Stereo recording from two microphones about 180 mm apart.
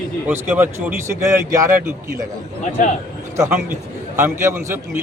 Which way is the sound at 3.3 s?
15° right (ahead or behind).